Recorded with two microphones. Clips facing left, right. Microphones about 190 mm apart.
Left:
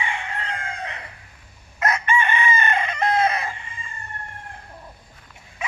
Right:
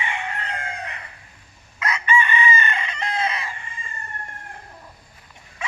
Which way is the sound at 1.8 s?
50° left (ahead or behind).